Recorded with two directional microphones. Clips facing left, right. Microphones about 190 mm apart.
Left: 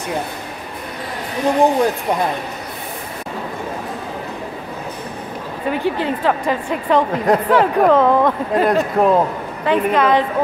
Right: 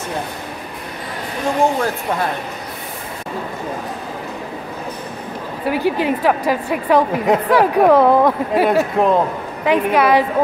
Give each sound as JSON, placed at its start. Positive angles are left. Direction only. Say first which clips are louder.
{"t": 1.6, "sound": "speech", "louder": "left 2 dB", "side_deg": 15}
{"t": 5.7, "sound": "a woman's voice", "louder": "right 2 dB", "side_deg": -10}
{"t": 9.7, "sound": "a woman's voice", "louder": "right 1 dB", "side_deg": -10}